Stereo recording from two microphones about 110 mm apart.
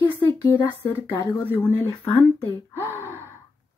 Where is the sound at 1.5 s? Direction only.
20° left (ahead or behind).